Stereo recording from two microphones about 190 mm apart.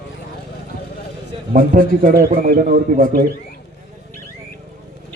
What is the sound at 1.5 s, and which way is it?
A man's voice, 50° right (ahead or behind).